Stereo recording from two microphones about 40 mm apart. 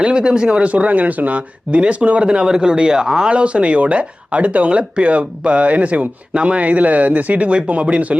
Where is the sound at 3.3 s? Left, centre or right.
Right.